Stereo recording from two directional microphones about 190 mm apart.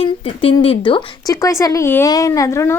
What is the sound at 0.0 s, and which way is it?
A woman's voice, 30° left (ahead or behind).